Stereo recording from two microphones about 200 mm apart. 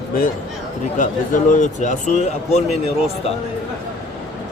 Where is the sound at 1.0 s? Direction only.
40° left (ahead or behind).